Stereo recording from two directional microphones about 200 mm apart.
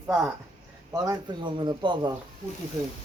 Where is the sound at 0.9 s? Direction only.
20° right (ahead or behind).